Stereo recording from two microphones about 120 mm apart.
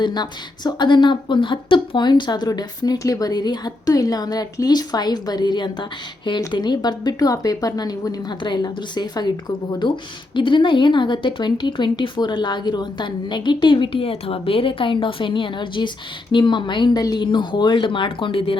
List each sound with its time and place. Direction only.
0.0 s a woman's voice: 35° left (ahead or behind)